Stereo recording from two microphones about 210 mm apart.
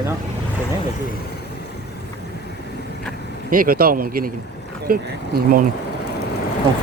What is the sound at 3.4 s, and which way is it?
Speech, 40° right (ahead or behind).